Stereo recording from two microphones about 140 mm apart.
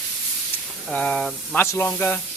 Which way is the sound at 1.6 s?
15° left (ahead or behind).